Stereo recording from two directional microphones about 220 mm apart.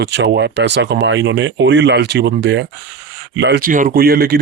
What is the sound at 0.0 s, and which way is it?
Speech, 50° right (ahead or behind).